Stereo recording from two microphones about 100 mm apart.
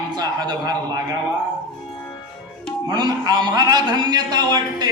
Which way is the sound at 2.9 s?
45° right (ahead or behind).